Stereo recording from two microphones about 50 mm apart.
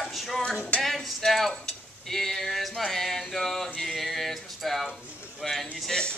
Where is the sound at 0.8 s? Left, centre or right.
Centre.